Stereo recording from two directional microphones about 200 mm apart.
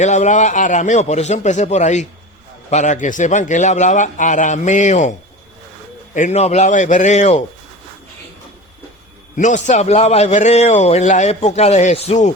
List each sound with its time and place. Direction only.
0.0 s a man's voice: 35° left (ahead or behind)
6.1 s a man's voice: 35° left (ahead or behind)
9.3 s a man's voice: 40° left (ahead or behind)